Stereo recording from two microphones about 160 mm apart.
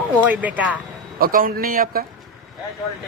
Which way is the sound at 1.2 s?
60° right (ahead or behind).